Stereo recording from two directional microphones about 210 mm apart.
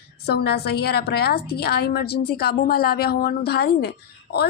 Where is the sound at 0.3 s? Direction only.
50° left (ahead or behind).